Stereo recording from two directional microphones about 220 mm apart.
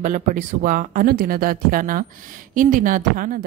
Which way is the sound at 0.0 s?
35° right (ahead or behind).